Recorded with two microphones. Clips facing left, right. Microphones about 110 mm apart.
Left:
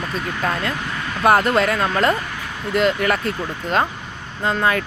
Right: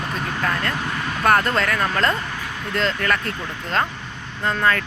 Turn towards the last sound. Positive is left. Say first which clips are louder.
# left 1 dB
turn(degrees=15)  # may be behind; listen again after turning